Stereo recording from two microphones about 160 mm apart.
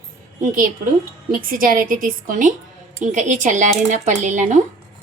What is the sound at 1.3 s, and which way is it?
A woman's voice, 60° right (ahead or behind).